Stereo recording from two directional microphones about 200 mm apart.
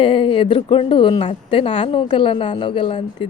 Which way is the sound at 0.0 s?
25° left (ahead or behind).